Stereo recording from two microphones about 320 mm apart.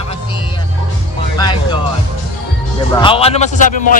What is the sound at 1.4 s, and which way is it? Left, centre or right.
Music, centre.